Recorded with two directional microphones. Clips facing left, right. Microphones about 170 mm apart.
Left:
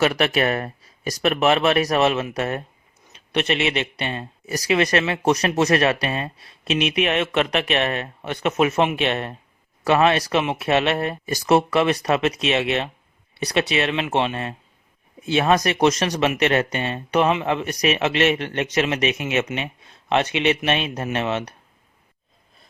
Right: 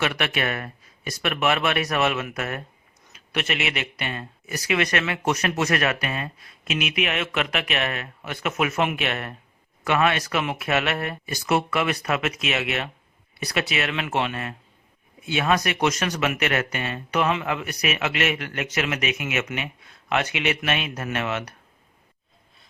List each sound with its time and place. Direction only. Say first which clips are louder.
0.0 s speech: left 6 dB; 40° left (ahead or behind); by 4.3 s 25° left (ahead or behind)
4.4 s speech: left 4 dB; 35° left (ahead or behind)